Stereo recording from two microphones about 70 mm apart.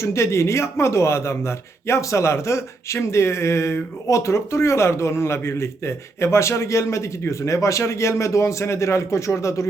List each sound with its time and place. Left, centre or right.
0.0 s speech: left